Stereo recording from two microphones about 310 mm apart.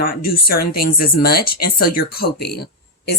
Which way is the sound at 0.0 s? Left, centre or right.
Left.